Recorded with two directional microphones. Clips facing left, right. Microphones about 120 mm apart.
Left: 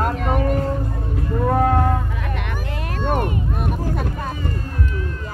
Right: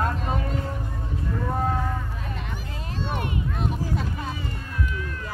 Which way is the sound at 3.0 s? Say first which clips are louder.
Left 7 dB; 50° left (ahead or behind).